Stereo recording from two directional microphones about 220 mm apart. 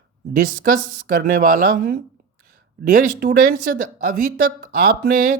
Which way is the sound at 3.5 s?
40° right (ahead or behind).